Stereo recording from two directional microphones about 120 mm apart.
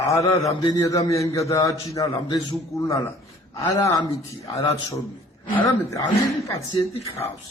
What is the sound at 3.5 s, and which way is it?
Speech, 25° left (ahead or behind).